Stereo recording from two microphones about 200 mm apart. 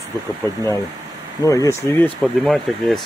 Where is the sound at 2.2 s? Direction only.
Centre (ahead or behind).